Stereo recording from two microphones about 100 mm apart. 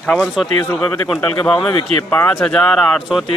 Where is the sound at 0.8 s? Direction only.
10° left (ahead or behind).